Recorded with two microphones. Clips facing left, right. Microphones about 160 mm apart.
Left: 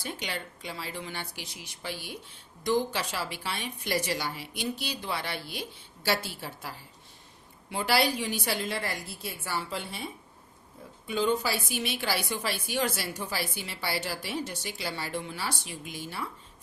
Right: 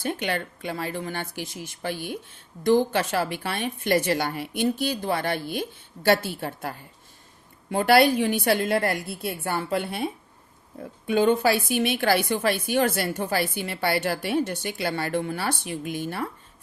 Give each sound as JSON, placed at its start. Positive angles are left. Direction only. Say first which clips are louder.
{"t": 0.0, "sound": "a woman's voice", "louder": "right 9 dB", "side_deg": -55}